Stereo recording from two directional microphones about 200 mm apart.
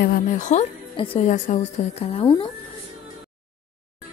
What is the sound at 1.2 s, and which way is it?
A woman's voice, 35° left (ahead or behind).